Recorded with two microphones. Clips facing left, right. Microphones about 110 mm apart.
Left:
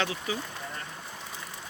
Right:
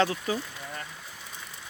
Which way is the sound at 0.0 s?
40° right (ahead or behind).